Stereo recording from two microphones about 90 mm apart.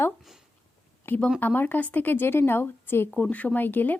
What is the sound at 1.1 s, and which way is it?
A woman's voice, 25° left (ahead or behind).